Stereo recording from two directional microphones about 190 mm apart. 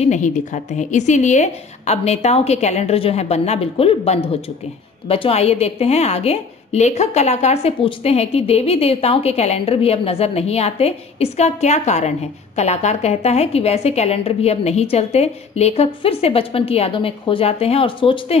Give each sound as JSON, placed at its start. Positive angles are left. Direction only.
{"t": 0.0, "sound": "a woman's voice", "side_deg": 40}